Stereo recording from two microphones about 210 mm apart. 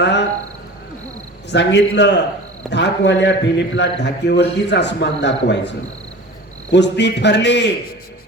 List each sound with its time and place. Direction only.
0.0 s a man's voice: 55° left (ahead or behind)
1.5 s a man's voice: 55° left (ahead or behind)
6.7 s a man's voice: 55° left (ahead or behind)